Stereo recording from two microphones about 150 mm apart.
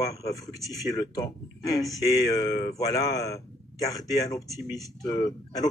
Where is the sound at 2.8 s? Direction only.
25° left (ahead or behind).